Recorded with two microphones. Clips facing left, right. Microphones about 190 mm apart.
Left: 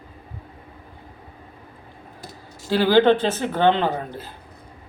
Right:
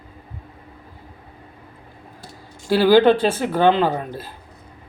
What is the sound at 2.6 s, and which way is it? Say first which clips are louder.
Speech: right 3 dB; 10° right (ahead or behind).